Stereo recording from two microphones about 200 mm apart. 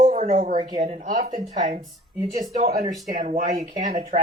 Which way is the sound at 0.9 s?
40° right (ahead or behind).